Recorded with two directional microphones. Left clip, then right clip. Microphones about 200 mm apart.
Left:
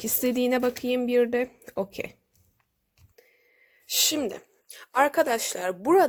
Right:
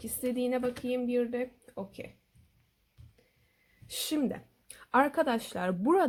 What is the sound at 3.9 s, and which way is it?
Speech, 45° left (ahead or behind).